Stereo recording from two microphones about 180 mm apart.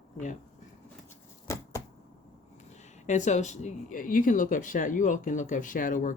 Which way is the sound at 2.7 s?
40° left (ahead or behind).